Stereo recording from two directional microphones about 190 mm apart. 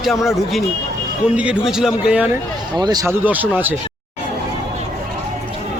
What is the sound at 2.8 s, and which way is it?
Speech, 20° right (ahead or behind).